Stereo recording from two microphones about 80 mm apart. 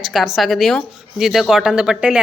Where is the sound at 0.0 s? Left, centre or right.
Centre.